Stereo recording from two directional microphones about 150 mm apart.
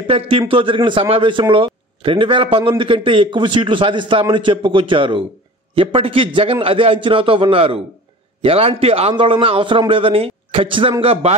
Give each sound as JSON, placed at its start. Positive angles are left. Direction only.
{"t": 0.0, "sound": "a man's voice", "side_deg": -40}